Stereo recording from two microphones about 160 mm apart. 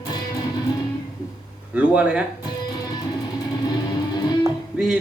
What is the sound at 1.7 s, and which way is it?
Speech, 10° right (ahead or behind).